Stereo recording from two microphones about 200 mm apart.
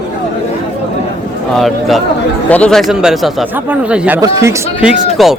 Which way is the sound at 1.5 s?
Centre (ahead or behind).